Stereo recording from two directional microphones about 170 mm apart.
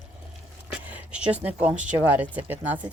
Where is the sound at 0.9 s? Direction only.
5° right (ahead or behind).